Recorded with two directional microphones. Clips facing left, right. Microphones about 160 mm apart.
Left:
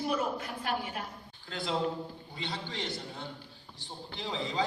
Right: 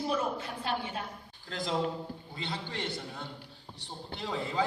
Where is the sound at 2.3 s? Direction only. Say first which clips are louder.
Even; 50° right (ahead or behind).